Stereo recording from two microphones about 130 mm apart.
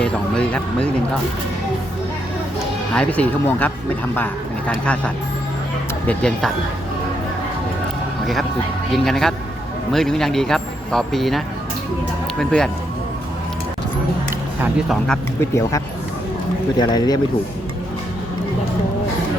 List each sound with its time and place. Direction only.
0.0 s a sound: 5° left (ahead or behind)
2.9 s speech: 10° left (ahead or behind)
8.9 s a man's voice: centre (ahead or behind)
14.8 s a man's voice: 5° left (ahead or behind)
15.4 s speech: 20° left (ahead or behind)